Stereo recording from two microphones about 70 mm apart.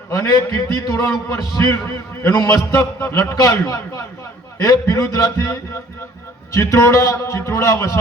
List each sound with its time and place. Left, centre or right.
0.1 s a man's voice: left
2.3 s a man's voice: left
2.7 s a man's voice: left